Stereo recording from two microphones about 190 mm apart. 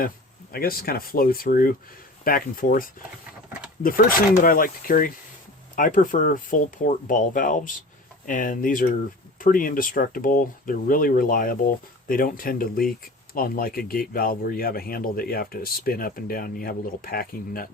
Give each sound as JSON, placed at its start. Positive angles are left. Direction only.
{"t": 0.5, "sound": "speech", "side_deg": 55}
{"t": 4.4, "sound": "speech", "side_deg": 50}